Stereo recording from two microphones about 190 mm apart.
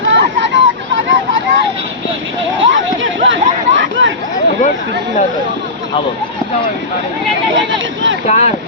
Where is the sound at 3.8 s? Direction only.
90° right.